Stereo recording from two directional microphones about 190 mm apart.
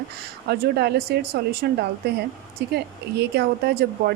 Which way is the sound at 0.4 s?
60° right (ahead or behind).